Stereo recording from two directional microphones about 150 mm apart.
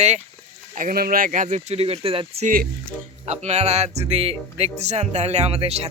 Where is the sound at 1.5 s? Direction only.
45° right (ahead or behind).